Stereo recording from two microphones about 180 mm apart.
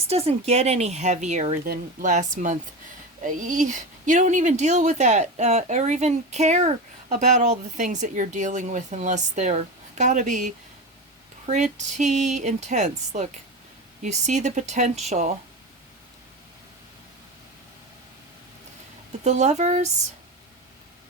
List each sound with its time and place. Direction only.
0.1 s speech: 35° right (ahead or behind)
19.2 s speech: 40° right (ahead or behind)